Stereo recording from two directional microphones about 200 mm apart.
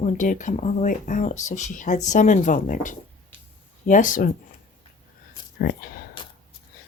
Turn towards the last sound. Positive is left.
turn(degrees=25)  # may be behind; listen again after turning